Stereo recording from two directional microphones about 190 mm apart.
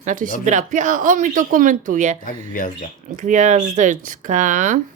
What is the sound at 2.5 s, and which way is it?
Speech, 45° left (ahead or behind).